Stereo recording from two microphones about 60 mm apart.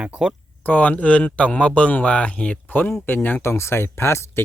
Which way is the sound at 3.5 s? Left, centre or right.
Left.